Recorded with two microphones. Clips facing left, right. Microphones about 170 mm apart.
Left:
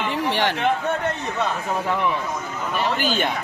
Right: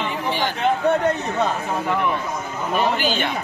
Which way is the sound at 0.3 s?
70° left (ahead or behind).